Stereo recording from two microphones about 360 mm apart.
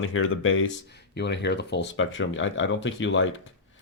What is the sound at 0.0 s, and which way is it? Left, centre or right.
Speech, left.